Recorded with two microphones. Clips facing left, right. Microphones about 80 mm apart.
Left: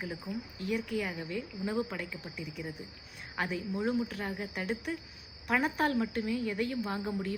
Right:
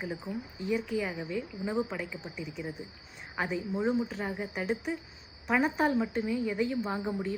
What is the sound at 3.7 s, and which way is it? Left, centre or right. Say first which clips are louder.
A woman's voice: right 3 dB; centre.